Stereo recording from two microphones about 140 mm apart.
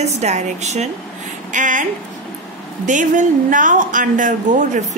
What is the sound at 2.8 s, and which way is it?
Speech, 65° right (ahead or behind).